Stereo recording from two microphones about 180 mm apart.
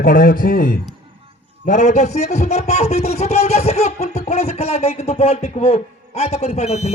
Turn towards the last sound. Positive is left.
turn(degrees=40)  # may be behind; listen again after turning